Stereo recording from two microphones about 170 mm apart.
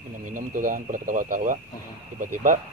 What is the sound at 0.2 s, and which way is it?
Speech, 50° right (ahead or behind).